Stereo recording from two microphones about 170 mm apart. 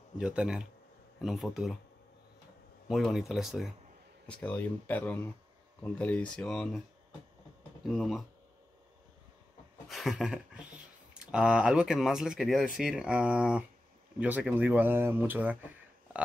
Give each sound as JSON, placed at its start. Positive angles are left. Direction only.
{"t": 0.2, "sound": "speech", "side_deg": -5}
{"t": 2.9, "sound": "speech", "side_deg": 0}
{"t": 7.8, "sound": "speech", "side_deg": 0}
{"t": 9.8, "sound": "speech", "side_deg": 0}